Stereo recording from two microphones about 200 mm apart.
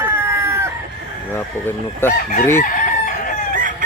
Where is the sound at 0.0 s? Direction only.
10° right (ahead or behind).